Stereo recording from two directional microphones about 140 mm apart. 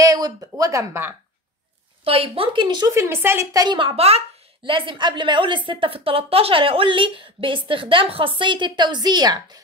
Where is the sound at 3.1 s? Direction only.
15° right (ahead or behind).